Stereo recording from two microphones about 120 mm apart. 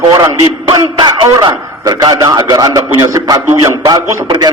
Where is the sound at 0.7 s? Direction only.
35° right (ahead or behind).